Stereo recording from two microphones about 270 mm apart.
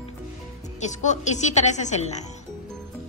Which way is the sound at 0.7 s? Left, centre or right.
Left.